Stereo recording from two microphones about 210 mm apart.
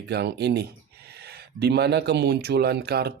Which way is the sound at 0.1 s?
50° right (ahead or behind).